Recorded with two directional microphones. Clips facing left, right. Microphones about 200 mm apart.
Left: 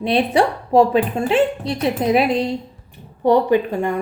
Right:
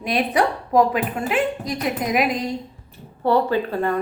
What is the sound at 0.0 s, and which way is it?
A woman's voice, 30° left (ahead or behind).